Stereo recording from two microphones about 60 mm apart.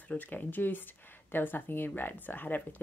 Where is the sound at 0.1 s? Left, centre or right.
Left.